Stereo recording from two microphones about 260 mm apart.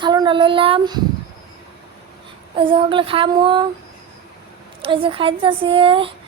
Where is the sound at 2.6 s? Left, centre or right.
Centre.